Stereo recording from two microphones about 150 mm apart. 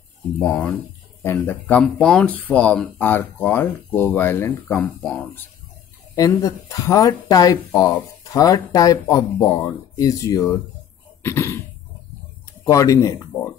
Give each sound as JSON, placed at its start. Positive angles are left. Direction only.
{"t": 0.4, "sound": "speech", "side_deg": 10}
{"t": 6.1, "sound": "speech", "side_deg": 20}
{"t": 12.6, "sound": "speech", "side_deg": 20}